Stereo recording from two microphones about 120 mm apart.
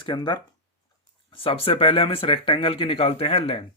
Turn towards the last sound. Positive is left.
turn(degrees=55)  # may be behind; listen again after turning